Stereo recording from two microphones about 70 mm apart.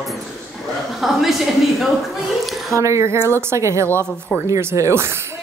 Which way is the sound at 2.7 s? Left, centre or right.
Right.